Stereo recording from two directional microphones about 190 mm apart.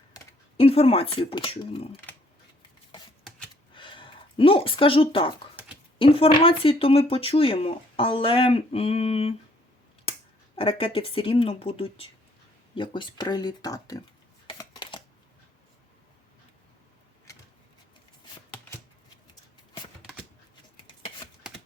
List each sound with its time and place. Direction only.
0.5 s speech: 30° left (ahead or behind)
3.8 s a sound: 25° left (ahead or behind)
6.0 s speech: 30° left (ahead or behind)
10.6 s speech: 30° left (ahead or behind)
14.4 s a sound: 25° left (ahead or behind)
20.0 s shuffling cards: 5° right (ahead or behind)